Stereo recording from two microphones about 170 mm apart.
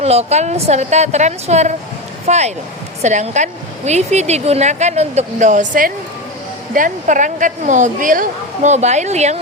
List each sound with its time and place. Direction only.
0.0 s a woman's voice: 40° right (ahead or behind)